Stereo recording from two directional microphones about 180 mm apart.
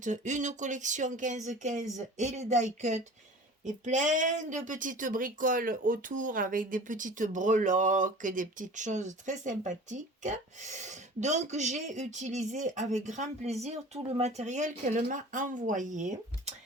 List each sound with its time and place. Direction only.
0.0 s speech: 45° right (ahead or behind)